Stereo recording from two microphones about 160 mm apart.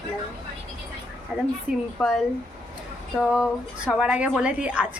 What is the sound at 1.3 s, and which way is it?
Speech, 5° right (ahead or behind).